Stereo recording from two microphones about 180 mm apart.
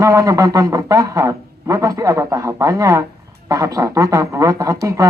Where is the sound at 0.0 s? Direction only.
20° right (ahead or behind).